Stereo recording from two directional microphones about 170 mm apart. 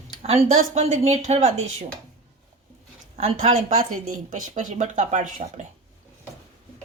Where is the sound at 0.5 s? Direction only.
45° right (ahead or behind).